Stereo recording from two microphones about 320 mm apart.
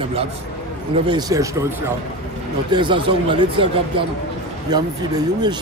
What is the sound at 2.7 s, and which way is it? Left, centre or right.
A man's voice, centre.